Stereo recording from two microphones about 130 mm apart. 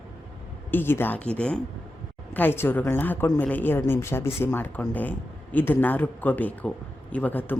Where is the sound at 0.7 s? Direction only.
15° left (ahead or behind).